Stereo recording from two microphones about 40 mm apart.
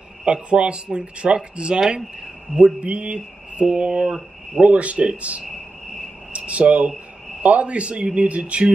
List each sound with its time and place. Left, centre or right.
0.2 s speech: right
2.8 s speech: right
6.3 s a sound: right
7.4 s speech: right